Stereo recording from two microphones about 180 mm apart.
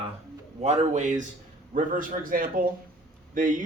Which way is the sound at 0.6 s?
40° right (ahead or behind).